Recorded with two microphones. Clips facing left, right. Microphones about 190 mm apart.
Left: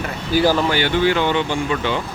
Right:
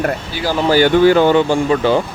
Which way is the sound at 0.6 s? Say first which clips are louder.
Right 7 dB; 40° right (ahead or behind).